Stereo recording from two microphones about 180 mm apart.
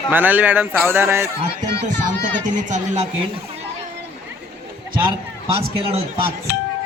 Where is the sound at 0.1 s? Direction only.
10° right (ahead or behind).